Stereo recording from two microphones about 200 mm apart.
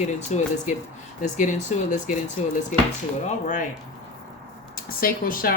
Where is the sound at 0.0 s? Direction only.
40° left (ahead or behind).